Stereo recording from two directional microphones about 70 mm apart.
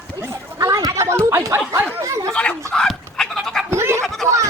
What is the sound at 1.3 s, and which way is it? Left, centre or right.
Speech, right.